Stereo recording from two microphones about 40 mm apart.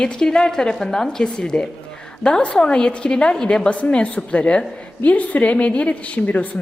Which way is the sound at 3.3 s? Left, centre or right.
Centre.